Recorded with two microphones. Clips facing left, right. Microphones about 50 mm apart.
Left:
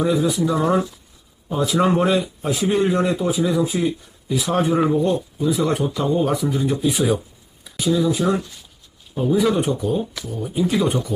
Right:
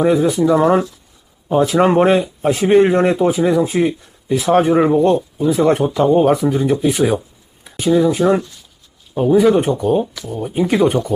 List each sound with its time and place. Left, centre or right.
0.0 s speech: right
1.5 s speech: right
5.5 s speech: right
6.9 s speech: right